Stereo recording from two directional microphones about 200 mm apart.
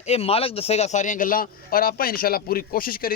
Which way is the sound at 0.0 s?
30° left (ahead or behind).